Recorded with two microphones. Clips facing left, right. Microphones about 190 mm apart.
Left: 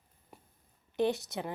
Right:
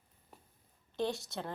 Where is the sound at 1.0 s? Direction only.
20° left (ahead or behind).